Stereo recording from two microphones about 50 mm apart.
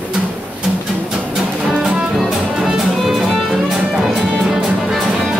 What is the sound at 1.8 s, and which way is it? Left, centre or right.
Music, centre.